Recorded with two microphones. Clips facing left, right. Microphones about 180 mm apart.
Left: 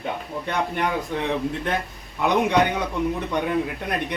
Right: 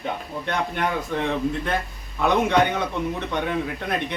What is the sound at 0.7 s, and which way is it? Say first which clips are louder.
A man's voice: even; 10° left (ahead or behind).